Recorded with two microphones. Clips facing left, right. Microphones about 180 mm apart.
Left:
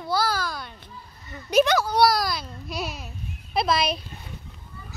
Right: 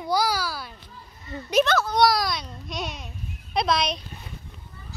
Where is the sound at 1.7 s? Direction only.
10° left (ahead or behind).